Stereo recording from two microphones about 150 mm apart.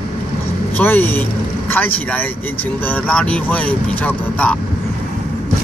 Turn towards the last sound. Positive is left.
turn(degrees=10)  # may be behind; listen again after turning